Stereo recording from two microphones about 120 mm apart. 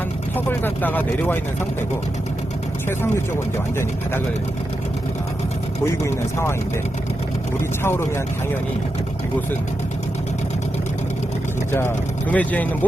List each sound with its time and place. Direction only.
0.3 s speech: 15° left (ahead or behind)
7.9 s speech: 20° left (ahead or behind)
12.3 s speech: 10° left (ahead or behind)